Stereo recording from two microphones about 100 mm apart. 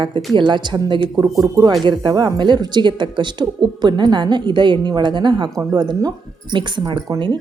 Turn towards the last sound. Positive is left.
turn(degrees=-40)  # may be behind; listen again after turning